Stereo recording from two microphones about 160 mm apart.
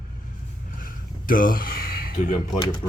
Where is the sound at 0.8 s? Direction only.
60° left (ahead or behind).